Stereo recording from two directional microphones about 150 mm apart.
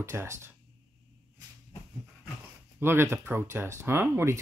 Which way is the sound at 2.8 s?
15° right (ahead or behind).